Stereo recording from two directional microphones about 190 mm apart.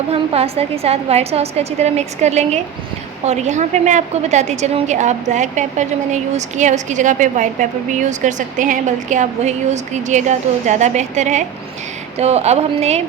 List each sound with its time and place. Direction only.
0.1 s a woman's voice: 30° right (ahead or behind)